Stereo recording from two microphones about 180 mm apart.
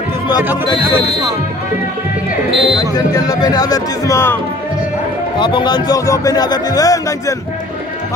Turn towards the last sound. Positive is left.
turn(degrees=20)  # may be behind; listen again after turning